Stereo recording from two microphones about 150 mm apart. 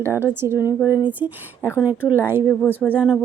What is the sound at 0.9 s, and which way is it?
Speech, 25° left (ahead or behind).